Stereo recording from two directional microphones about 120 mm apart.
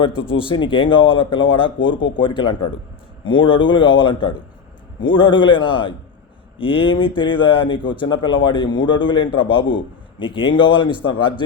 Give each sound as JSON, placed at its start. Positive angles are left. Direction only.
{"t": 0.0, "sound": "speech", "side_deg": 50}